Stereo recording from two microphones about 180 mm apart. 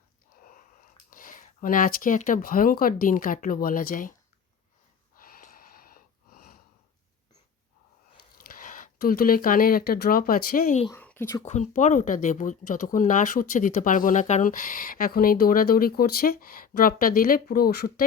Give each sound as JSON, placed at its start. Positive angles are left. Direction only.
{"t": 1.1, "sound": "speech", "side_deg": 50}
{"t": 5.1, "sound": "snort", "side_deg": 55}
{"t": 8.1, "sound": "speech", "side_deg": 55}
{"t": 10.9, "sound": "speech", "side_deg": 10}
{"t": 11.4, "sound": "speech", "side_deg": 40}